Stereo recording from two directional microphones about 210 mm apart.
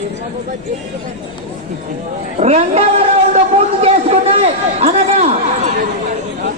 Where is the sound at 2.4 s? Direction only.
30° right (ahead or behind).